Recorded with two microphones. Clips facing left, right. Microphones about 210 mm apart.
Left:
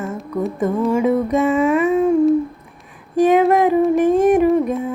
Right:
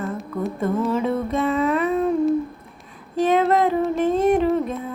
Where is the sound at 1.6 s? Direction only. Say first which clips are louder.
Left 5 dB; 10° left (ahead or behind).